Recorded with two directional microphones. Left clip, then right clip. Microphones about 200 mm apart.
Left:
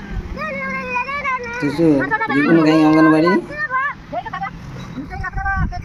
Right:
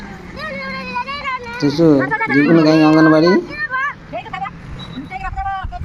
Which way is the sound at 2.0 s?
25° left (ahead or behind).